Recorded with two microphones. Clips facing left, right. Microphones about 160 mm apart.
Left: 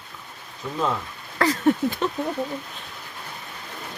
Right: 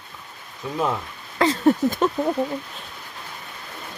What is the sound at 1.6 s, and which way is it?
Speech, 45° right (ahead or behind).